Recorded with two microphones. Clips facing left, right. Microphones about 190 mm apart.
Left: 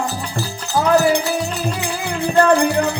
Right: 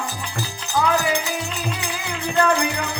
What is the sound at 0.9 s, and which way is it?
Music, 40° left (ahead or behind).